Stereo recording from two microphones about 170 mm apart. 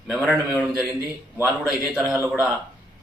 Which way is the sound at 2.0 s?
15° right (ahead or behind).